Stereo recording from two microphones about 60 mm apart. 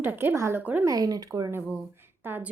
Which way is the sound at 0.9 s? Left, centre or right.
Right.